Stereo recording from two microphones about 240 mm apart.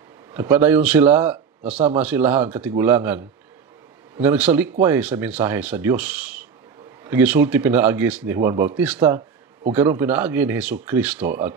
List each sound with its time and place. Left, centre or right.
0.3 s speech: centre
1.7 s a man's voice: right
2.0 s speech: centre